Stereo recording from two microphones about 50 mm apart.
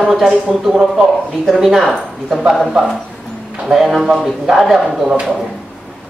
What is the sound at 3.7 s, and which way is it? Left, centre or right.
A man's voice, centre.